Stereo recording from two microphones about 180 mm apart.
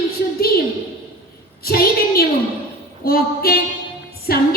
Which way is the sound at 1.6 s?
55° left (ahead or behind).